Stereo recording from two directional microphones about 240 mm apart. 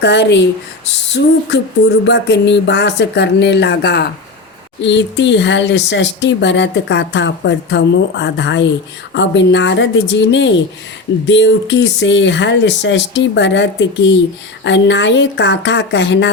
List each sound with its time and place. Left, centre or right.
0.0 s speech: left